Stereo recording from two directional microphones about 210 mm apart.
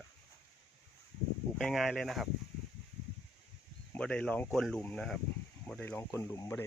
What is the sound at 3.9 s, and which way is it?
Speech, 5° left (ahead or behind).